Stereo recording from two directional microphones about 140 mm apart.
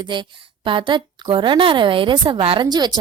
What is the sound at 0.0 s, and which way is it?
A woman's voice, 35° right (ahead or behind).